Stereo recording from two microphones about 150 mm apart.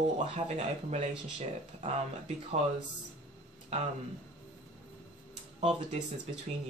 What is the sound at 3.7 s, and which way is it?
Speech, 45° right (ahead or behind).